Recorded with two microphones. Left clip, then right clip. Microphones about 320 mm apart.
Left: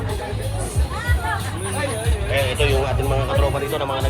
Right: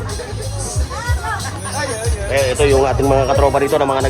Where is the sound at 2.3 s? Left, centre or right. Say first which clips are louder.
Right 6 dB; centre.